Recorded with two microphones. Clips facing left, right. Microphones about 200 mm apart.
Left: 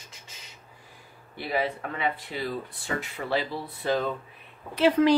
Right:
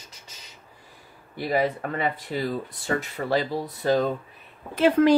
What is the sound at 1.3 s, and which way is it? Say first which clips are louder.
Speech: right 4 dB; 40° right (ahead or behind).